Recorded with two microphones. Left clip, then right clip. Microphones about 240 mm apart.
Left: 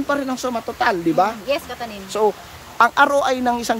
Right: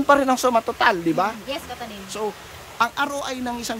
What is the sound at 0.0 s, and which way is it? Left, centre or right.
A woman's voice, centre.